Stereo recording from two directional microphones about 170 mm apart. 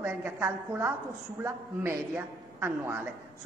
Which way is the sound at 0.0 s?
15° right (ahead or behind).